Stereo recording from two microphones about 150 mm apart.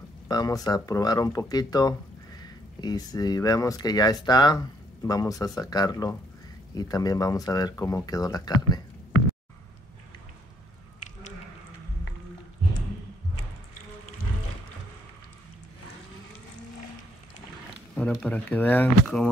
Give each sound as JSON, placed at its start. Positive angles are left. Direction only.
{"t": 0.3, "sound": "speech", "side_deg": 25}
{"t": 18.2, "sound": "speech", "side_deg": 10}